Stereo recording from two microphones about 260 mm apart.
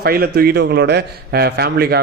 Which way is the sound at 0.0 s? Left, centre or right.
Right.